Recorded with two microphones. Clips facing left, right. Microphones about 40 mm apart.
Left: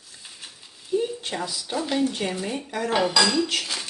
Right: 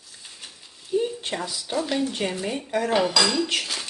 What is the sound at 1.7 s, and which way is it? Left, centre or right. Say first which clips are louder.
Dishes: left 1 dB; centre.